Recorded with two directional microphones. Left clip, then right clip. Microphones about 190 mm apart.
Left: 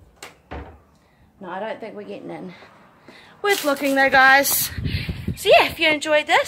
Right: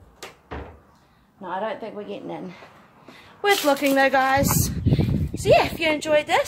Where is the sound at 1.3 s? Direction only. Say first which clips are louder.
Right 1 dB; 5° right (ahead or behind).